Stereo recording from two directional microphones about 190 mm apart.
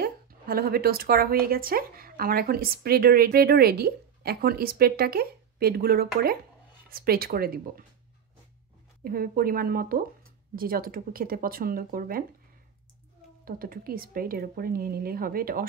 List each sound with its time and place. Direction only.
0.0 s a woman's voice: 55° right (ahead or behind)
9.0 s a woman's voice: 50° right (ahead or behind)
13.5 s a woman's voice: 50° right (ahead or behind)